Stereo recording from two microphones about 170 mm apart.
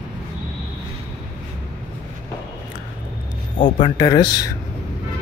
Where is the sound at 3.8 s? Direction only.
25° left (ahead or behind).